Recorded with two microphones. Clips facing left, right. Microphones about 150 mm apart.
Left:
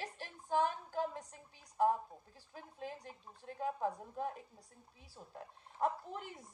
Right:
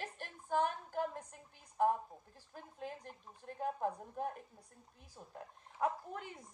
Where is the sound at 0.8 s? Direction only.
10° left (ahead or behind).